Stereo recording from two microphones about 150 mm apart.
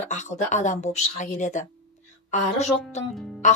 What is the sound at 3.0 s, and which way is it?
Speech, 50° left (ahead or behind).